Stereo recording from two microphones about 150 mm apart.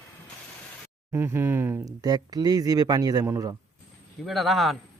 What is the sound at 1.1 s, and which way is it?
Speech, 15° right (ahead or behind).